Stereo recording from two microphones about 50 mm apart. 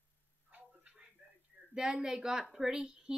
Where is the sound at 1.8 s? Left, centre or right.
Centre.